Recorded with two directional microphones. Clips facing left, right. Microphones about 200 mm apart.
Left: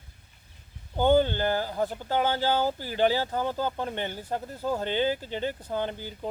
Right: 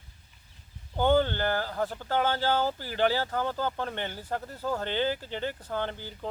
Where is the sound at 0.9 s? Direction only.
15° left (ahead or behind).